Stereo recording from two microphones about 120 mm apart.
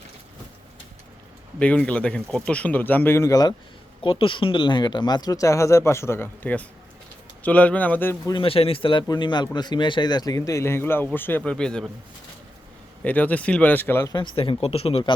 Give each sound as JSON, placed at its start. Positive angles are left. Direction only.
{"t": 1.5, "sound": "speech", "side_deg": 10}
{"t": 4.0, "sound": "a man's voice", "side_deg": 45}
{"t": 8.3, "sound": "a man's voice", "side_deg": 50}
{"t": 13.1, "sound": "speech", "side_deg": 15}
{"t": 14.1, "sound": "speech", "side_deg": 40}